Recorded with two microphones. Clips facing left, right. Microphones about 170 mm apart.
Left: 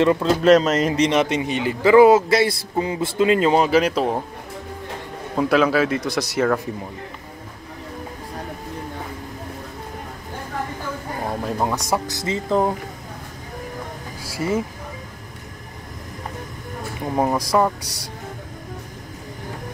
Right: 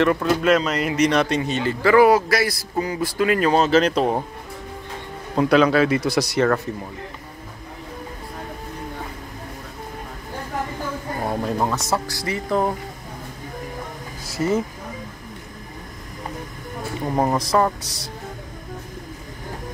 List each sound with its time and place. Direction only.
0.0 s a man's voice: 20° left (ahead or behind)
0.4 s speech: 35° left (ahead or behind)
0.9 s a man's voice: 20° left (ahead or behind); by 4.2 s centre (ahead or behind)
5.3 s a man's voice: centre (ahead or behind)
11.7 s a man's voice: 15° left (ahead or behind)
14.2 s a sound: 10° left (ahead or behind)
17.0 s a man's voice: 5° left (ahead or behind)